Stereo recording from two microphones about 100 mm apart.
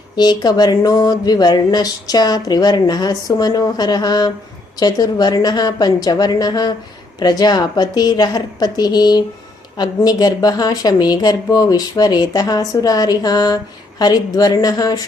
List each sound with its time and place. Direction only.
0.2 s speech: 45° left (ahead or behind)